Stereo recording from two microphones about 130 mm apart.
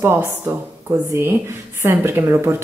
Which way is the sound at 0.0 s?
20° right (ahead or behind).